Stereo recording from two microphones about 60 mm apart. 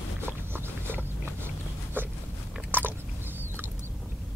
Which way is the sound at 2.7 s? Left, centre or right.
Right.